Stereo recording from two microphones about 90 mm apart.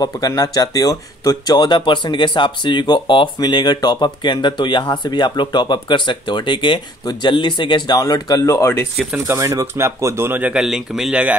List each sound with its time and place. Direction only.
0.0 s speech: 45° left (ahead or behind)
9.3 s speech: 35° right (ahead or behind)
10.5 s speech: 5° right (ahead or behind)